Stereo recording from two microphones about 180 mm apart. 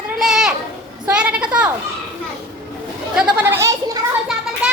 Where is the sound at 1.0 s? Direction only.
5° right (ahead or behind).